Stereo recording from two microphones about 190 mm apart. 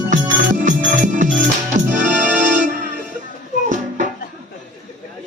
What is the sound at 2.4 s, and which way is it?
Music, 40° right (ahead or behind).